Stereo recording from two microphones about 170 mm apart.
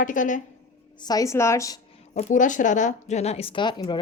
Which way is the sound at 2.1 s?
50° left (ahead or behind).